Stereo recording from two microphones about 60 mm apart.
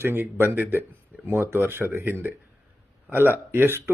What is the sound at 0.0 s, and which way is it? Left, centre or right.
Speech, right.